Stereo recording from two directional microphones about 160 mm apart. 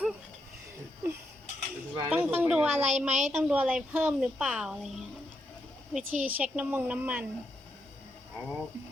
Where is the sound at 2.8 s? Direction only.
45° right (ahead or behind).